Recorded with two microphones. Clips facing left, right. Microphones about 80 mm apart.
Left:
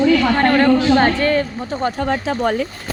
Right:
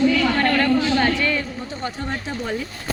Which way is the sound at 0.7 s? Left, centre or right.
Left.